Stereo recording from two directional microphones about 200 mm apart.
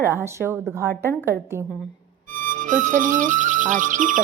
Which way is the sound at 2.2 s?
40° right (ahead or behind).